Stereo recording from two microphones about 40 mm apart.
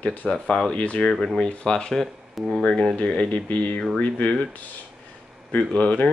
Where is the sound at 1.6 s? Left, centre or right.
Centre.